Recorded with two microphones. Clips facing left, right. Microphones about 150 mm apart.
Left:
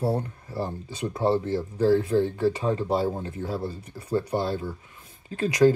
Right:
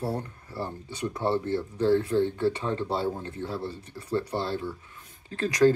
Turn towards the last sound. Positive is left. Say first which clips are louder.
# left 2 dB
turn(degrees=15)  # may be behind; listen again after turning